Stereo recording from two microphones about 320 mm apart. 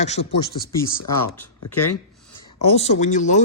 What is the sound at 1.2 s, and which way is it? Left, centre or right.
Speech, left.